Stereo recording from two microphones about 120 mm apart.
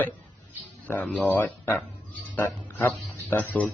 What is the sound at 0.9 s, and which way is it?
Speech, 10° left (ahead or behind).